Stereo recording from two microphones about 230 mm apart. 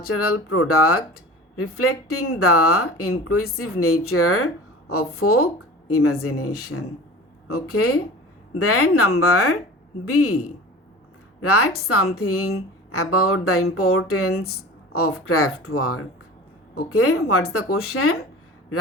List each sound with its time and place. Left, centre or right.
0.0 s a woman's voice: left